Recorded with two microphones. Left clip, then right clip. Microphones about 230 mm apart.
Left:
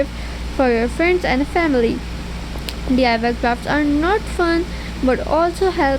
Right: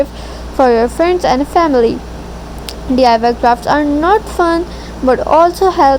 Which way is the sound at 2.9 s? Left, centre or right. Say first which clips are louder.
Right 8 dB; centre.